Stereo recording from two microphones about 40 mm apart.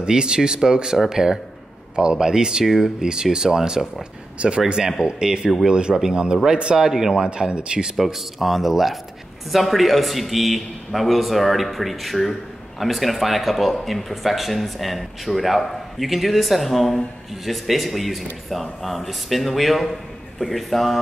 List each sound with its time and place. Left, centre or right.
0.0 s speech: centre
4.4 s speech: right; by 7.2 s centre
7.3 s speech: right
7.9 s a man's voice: centre